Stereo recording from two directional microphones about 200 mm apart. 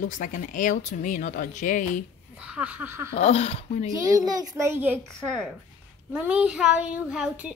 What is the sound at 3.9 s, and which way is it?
A child's voice, 20° right (ahead or behind).